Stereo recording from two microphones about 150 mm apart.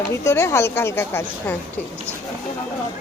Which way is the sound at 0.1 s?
15° left (ahead or behind).